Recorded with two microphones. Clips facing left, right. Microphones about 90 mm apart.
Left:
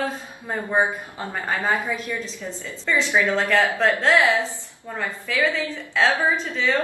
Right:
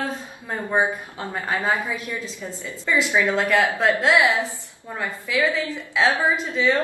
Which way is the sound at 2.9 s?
15° right (ahead or behind).